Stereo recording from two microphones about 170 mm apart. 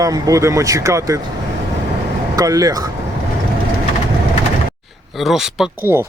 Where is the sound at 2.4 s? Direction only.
20° right (ahead or behind).